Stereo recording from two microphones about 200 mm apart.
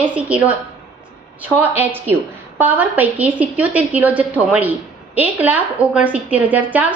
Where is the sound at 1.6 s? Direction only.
10° right (ahead or behind).